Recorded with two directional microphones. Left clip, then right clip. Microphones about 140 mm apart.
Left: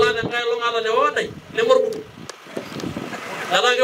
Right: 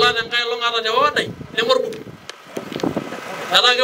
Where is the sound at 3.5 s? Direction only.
25° right (ahead or behind).